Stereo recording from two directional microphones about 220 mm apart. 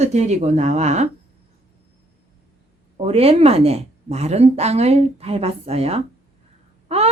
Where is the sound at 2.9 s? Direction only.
25° right (ahead or behind).